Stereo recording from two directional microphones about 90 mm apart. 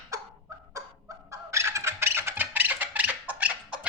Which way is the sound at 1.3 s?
30° right (ahead or behind).